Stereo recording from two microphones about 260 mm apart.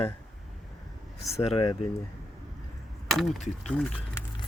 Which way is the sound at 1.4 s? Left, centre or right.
Left.